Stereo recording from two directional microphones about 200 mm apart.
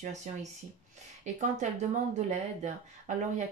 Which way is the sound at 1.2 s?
35° right (ahead or behind).